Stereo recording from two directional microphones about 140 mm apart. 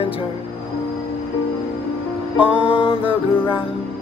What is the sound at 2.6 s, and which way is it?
Music, 40° left (ahead or behind).